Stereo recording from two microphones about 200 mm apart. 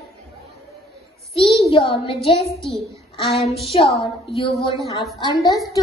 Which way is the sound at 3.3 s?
30° left (ahead or behind).